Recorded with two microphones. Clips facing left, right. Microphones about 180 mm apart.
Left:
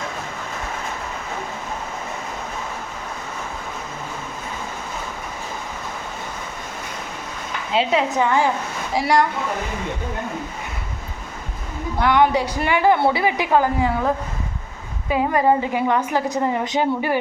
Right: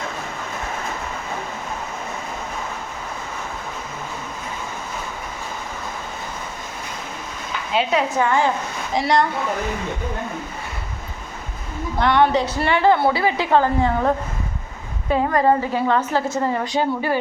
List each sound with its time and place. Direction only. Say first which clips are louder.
7.7 s a woman's voice: left 1 dB; 25° left (ahead or behind); by 9.2 s 10° left (ahead or behind)
11.9 s a woman's voice: even; 10° left (ahead or behind)
15.1 s a woman's voice: even; 10° left (ahead or behind)